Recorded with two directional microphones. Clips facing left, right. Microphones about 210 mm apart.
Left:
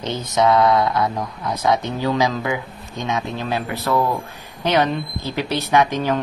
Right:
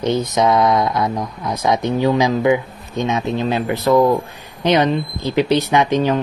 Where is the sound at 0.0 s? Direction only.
15° right (ahead or behind).